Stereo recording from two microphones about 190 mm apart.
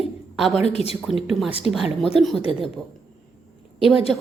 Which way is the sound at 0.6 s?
35° left (ahead or behind).